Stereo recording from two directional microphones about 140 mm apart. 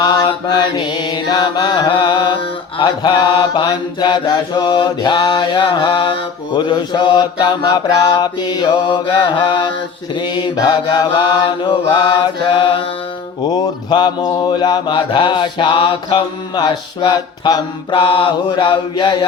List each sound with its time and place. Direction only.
0.0 s mantra: 35° left (ahead or behind)